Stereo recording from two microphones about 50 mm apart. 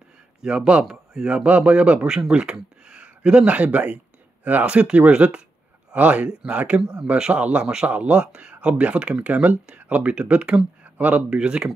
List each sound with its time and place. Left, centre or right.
0.4 s speech: centre
11.2 s speech: centre